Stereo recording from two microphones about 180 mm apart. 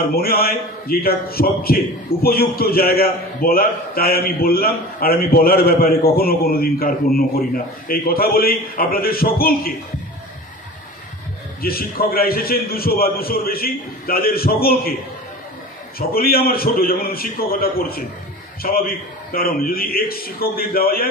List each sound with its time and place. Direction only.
0.1 s a man's voice: 55° left (ahead or behind)
11.6 s a man's voice: 55° left (ahead or behind)
16.0 s a man's voice: 55° left (ahead or behind)